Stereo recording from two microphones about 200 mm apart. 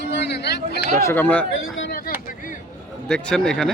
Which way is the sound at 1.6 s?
75° left (ahead or behind).